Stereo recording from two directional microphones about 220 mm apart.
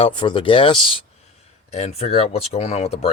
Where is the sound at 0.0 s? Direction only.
20° left (ahead or behind).